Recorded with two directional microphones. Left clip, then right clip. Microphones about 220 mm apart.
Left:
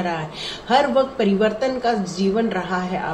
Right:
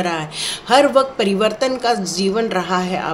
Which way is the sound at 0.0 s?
55° right (ahead or behind).